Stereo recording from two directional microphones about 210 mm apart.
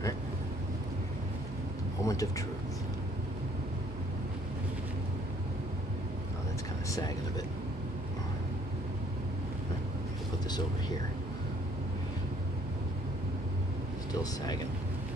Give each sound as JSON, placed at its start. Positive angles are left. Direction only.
{"t": 2.0, "sound": "speech", "side_deg": 15}
{"t": 6.9, "sound": "speech", "side_deg": 15}
{"t": 14.2, "sound": "speech", "side_deg": 20}